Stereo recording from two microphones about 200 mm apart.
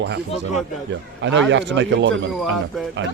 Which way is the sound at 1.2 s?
65° right (ahead or behind).